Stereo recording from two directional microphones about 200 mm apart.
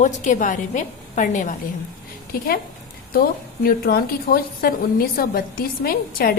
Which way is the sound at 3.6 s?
50° left (ahead or behind).